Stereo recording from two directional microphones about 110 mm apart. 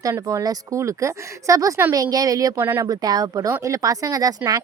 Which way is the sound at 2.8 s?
35° right (ahead or behind).